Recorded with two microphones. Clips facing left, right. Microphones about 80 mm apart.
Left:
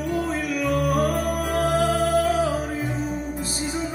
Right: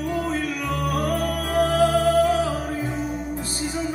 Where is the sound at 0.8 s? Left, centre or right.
Centre.